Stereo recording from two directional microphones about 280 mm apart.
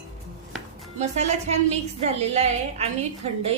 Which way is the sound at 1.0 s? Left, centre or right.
Right.